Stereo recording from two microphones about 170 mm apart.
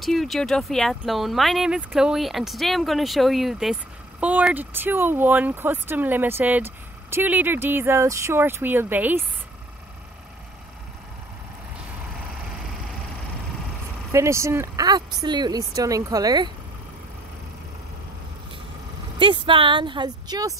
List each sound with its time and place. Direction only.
0.0 s speech: centre (ahead or behind)
14.1 s speech: 15° right (ahead or behind)
19.1 s speech: 30° right (ahead or behind)